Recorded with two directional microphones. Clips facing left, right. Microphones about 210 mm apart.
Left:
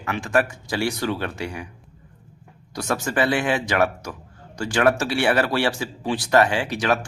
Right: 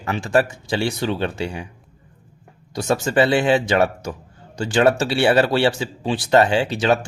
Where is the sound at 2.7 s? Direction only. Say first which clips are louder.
Right 5 dB; 25° right (ahead or behind).